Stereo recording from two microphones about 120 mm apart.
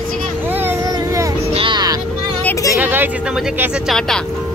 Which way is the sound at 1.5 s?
45° right (ahead or behind).